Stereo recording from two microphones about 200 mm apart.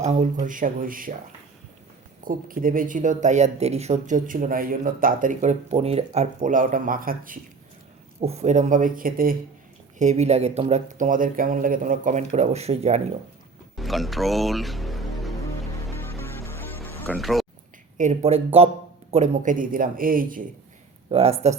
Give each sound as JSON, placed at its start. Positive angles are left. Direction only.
{"t": 0.0, "sound": "speech", "side_deg": -35}
{"t": 2.2, "sound": "speech", "side_deg": -45}
{"t": 8.2, "sound": "speech", "side_deg": -30}
{"t": 10.0, "sound": "speech", "side_deg": -35}
{"t": 13.7, "sound": "speech", "side_deg": 0}
{"t": 15.4, "sound": "music", "side_deg": 15}
{"t": 17.1, "sound": "speech", "side_deg": 0}
{"t": 17.9, "sound": "speech", "side_deg": -35}
{"t": 21.1, "sound": "speech", "side_deg": -30}